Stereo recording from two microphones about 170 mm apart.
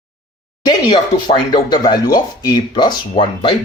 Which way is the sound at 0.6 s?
25° left (ahead or behind).